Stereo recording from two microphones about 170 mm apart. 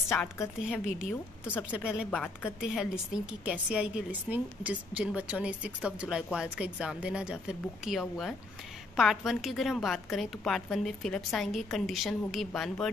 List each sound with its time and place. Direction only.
0.7 s a woman's voice: 5° right (ahead or behind)
2.0 s a woman's voice: 5° left (ahead or behind)
2.6 s a woman's voice: 5° right (ahead or behind)